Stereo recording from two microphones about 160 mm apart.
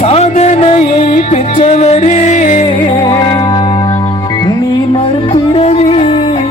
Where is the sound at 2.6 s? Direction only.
30° left (ahead or behind).